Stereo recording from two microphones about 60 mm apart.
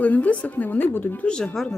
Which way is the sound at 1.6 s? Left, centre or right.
Centre.